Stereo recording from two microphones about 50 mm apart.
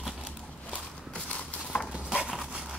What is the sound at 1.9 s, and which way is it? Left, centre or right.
Dog, centre.